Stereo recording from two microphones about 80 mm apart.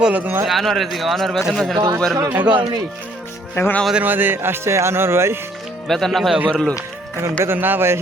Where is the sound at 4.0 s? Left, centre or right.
Right.